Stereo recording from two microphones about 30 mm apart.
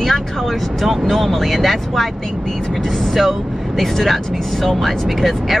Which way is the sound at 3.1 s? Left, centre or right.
Centre.